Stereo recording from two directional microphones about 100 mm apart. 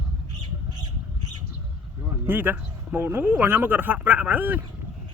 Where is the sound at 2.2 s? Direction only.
20° right (ahead or behind).